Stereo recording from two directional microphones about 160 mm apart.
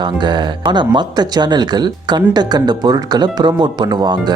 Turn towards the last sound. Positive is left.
turn(degrees=-25)  # may be behind; listen again after turning